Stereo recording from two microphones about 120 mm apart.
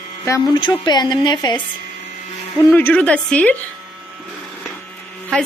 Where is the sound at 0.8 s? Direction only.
35° left (ahead or behind).